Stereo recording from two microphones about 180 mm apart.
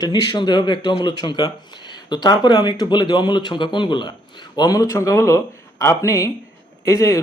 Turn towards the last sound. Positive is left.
turn(degrees=15)  # may be behind; listen again after turning